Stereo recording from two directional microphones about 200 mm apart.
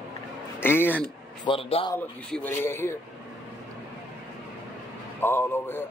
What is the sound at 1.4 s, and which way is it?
Speech, 25° left (ahead or behind).